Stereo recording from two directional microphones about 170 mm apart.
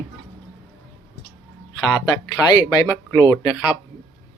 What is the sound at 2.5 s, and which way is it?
Speech, 20° left (ahead or behind).